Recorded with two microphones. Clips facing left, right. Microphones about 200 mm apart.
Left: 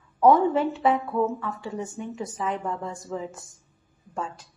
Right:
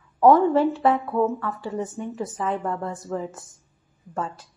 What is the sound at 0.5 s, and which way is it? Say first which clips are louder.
Speech: right 3 dB; centre (ahead or behind).